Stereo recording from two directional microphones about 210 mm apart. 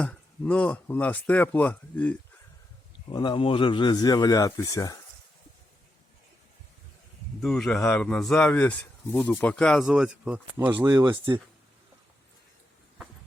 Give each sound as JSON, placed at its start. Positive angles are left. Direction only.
{"t": 0.0, "sound": "speech", "side_deg": 5}
{"t": 3.1, "sound": "speech", "side_deg": 20}
{"t": 7.4, "sound": "speech", "side_deg": 0}
{"t": 10.7, "sound": "speech", "side_deg": -20}